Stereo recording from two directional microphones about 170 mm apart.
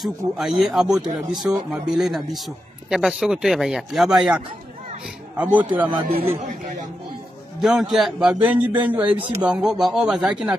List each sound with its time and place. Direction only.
0.0 s a man's voice: centre (ahead or behind)
6.2 s a man's voice: 45° right (ahead or behind)
7.6 s a man's voice: centre (ahead or behind)